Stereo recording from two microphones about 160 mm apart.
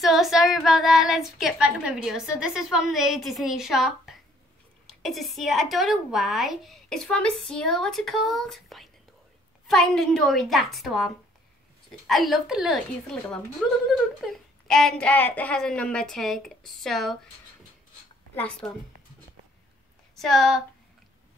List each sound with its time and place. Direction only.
0.0 s a woman's voice: centre (ahead or behind)
12.1 s a woman's voice: centre (ahead or behind)
18.3 s a woman's voice: 10° left (ahead or behind)
20.2 s a woman's voice: centre (ahead or behind)